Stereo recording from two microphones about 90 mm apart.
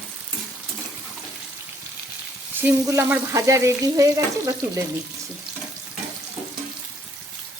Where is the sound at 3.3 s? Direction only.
35° right (ahead or behind).